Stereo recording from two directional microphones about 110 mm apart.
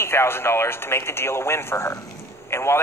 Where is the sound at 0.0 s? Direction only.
20° left (ahead or behind).